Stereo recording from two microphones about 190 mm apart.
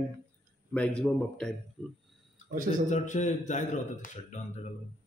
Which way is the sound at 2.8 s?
40° left (ahead or behind).